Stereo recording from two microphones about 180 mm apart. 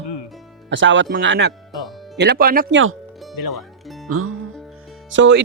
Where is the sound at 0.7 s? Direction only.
90° right.